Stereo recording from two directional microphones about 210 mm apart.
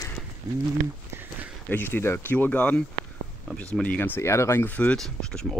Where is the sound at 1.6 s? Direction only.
10° left (ahead or behind).